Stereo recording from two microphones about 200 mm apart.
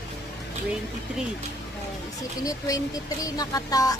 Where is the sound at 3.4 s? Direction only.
20° left (ahead or behind).